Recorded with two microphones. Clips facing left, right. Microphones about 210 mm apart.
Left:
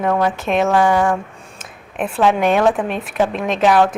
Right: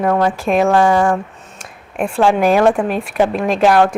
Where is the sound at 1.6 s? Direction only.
Centre (ahead or behind).